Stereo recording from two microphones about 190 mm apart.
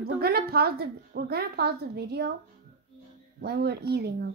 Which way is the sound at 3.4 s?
60° right (ahead or behind).